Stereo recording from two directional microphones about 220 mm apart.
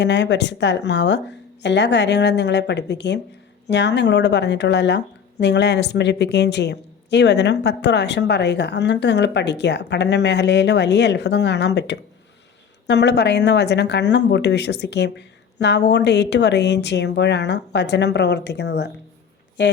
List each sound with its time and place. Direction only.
0.0 s speech: 50° left (ahead or behind)